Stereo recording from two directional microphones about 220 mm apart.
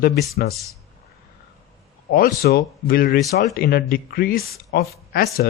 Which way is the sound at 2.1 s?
40° left (ahead or behind).